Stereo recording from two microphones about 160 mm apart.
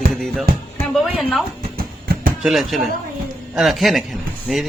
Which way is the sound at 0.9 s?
Centre (ahead or behind).